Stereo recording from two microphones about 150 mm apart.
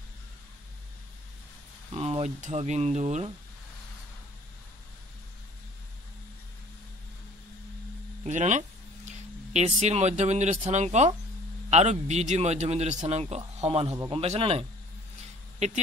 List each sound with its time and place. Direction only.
1.9 s speech: 40° right (ahead or behind)
8.3 s a man's voice: 55° right (ahead or behind)
15.1 s a sound: 50° right (ahead or behind)